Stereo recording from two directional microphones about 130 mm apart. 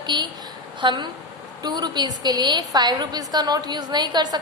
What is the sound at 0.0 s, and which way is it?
A woman's voice, 35° right (ahead or behind).